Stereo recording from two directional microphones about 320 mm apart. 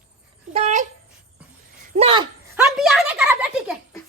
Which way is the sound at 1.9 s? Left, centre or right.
Centre.